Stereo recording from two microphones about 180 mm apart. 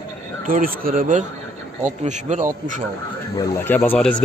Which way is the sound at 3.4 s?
15° left (ahead or behind).